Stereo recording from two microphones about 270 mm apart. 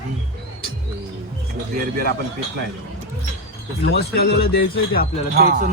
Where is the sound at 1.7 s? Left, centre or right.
Right.